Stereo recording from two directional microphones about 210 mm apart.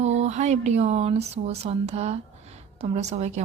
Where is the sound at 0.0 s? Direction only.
35° right (ahead or behind).